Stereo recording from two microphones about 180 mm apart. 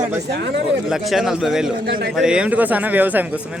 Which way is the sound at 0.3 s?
70° right (ahead or behind).